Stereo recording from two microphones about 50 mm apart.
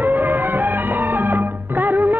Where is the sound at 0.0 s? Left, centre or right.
Right.